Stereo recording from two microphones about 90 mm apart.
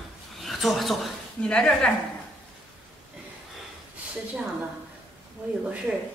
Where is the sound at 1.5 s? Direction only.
10° left (ahead or behind).